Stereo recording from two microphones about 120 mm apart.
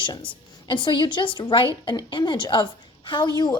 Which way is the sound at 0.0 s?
40° left (ahead or behind).